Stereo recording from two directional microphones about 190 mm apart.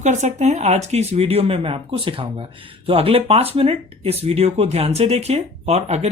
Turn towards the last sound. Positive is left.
turn(degrees=-35)  # may be behind; listen again after turning